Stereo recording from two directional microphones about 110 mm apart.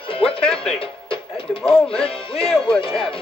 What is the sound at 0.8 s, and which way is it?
Music, 55° left (ahead or behind).